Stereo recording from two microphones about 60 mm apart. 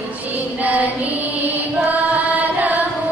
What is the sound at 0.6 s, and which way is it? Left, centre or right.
Music, right.